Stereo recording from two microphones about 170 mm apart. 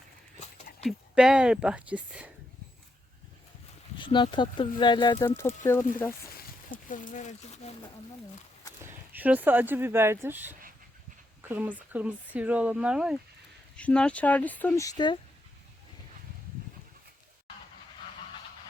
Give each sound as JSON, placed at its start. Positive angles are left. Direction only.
{"t": 0.9, "sound": "speech", "side_deg": -5}
{"t": 3.9, "sound": "speech", "side_deg": 30}
{"t": 5.2, "sound": "speech", "side_deg": 15}
{"t": 6.7, "sound": "speech", "side_deg": 50}
{"t": 8.8, "sound": "speech", "side_deg": -10}
{"t": 13.7, "sound": "speech", "side_deg": 5}